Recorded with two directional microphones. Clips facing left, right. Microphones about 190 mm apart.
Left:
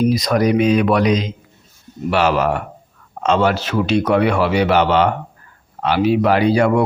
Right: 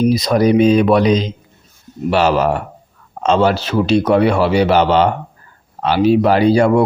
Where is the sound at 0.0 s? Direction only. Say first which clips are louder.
Right 2 dB; 25° right (ahead or behind).